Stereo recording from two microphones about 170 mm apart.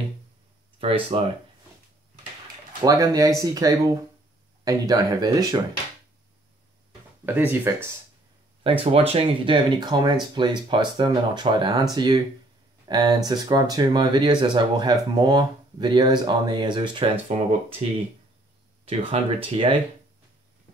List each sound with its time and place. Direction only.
0.7 s speech: 35° right (ahead or behind)
2.8 s speech: 20° right (ahead or behind)
7.2 s speech: 10° right (ahead or behind)
8.6 s speech: 35° right (ahead or behind)
18.9 s speech: 30° right (ahead or behind)